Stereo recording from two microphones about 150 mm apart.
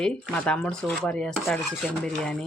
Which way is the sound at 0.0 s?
5° left (ahead or behind).